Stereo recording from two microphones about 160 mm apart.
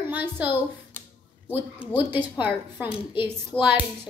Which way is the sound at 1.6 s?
10° right (ahead or behind).